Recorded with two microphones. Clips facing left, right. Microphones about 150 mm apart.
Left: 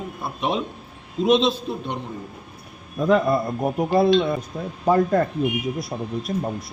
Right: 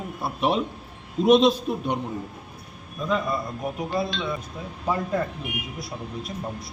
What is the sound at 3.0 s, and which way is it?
Speech, 55° left (ahead or behind).